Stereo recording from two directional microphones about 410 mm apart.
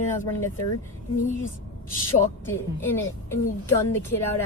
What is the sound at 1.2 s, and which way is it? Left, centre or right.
Speech, centre.